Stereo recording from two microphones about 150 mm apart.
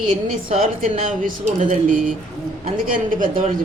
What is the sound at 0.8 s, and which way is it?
A man's voice, 60° right (ahead or behind).